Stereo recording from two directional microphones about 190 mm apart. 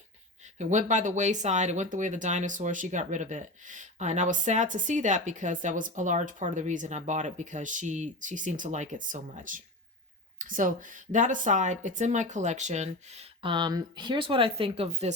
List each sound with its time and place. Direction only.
0.6 s speech: 40° right (ahead or behind)